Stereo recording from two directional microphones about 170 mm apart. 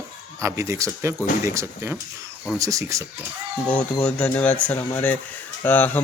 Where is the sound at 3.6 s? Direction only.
5° left (ahead or behind).